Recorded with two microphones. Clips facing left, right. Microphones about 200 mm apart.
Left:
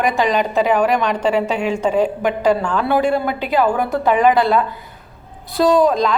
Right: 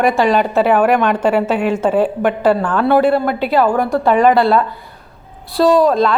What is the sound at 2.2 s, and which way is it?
A woman's voice, 50° right (ahead or behind).